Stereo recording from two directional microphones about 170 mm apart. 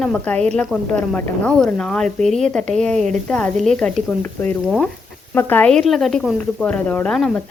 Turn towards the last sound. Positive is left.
turn(degrees=5)  # may be behind; listen again after turning